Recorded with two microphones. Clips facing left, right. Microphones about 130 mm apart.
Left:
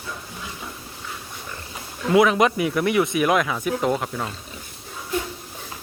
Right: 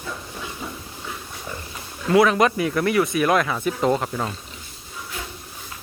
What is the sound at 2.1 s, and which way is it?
Speech, 15° left (ahead or behind).